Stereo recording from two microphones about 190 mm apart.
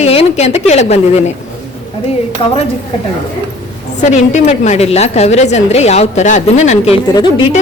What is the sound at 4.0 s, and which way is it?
A woman's voice, 40° left (ahead or behind).